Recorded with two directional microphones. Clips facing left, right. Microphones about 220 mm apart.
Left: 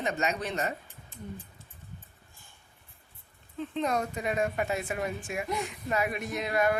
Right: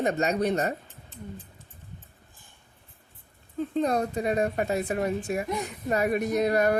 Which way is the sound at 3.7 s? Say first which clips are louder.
Right 4 dB; 35° right (ahead or behind).